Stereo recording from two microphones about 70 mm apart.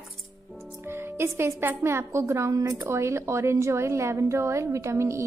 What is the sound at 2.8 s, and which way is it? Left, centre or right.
A woman's voice, right.